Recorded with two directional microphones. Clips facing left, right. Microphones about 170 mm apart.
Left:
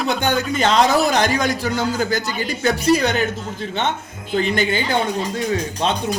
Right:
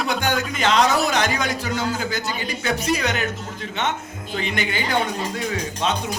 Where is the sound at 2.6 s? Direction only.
35° left (ahead or behind).